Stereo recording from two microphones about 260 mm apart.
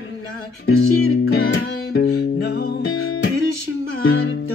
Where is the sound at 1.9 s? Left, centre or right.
Left.